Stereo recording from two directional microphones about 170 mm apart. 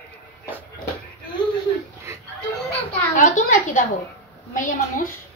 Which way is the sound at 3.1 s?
50° left (ahead or behind).